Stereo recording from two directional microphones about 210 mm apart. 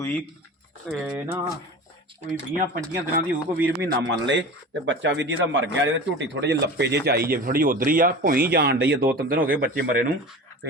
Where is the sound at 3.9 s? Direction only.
60° right (ahead or behind).